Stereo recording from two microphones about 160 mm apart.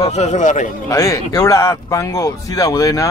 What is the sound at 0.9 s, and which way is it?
Speech, 20° left (ahead or behind).